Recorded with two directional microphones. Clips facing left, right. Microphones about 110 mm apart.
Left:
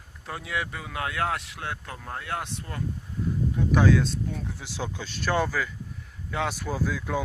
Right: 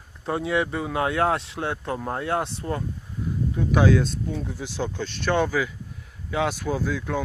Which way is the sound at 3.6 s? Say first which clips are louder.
Right 2 dB; 5° right (ahead or behind).